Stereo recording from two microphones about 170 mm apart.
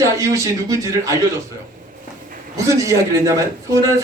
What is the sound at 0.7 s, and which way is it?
Speech, 20° right (ahead or behind).